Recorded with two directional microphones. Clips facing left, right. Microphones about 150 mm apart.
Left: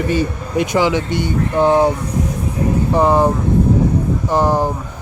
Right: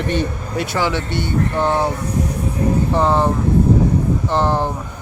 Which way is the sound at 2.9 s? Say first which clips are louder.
Left 6 dB; 10° left (ahead or behind).